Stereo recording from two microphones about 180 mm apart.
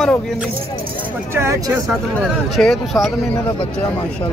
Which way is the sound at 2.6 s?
Centre (ahead or behind).